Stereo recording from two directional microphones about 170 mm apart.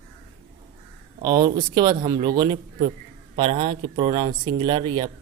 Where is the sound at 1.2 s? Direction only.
25° right (ahead or behind).